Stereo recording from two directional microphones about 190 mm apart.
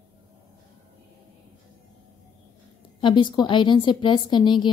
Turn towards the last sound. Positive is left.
turn(degrees=25)  # may be behind; listen again after turning